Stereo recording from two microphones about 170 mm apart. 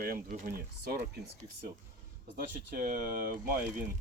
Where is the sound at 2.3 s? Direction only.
55° right (ahead or behind).